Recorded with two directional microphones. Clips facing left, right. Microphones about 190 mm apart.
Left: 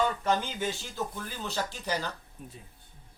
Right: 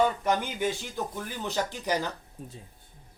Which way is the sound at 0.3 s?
15° right (ahead or behind).